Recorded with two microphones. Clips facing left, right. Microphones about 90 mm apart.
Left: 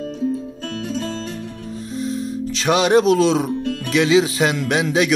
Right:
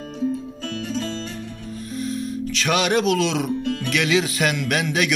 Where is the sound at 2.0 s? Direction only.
30° left (ahead or behind).